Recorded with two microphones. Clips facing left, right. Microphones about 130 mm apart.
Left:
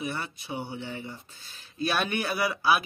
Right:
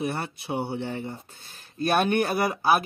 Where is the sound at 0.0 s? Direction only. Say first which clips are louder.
Right 4 dB; 55° right (ahead or behind).